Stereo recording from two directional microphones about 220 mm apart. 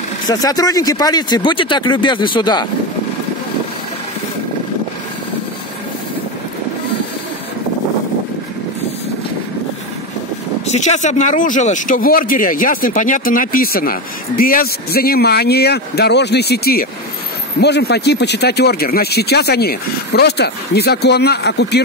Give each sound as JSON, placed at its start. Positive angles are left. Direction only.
{"t": 0.3, "sound": "speech", "side_deg": 15}
{"t": 10.7, "sound": "speech", "side_deg": 30}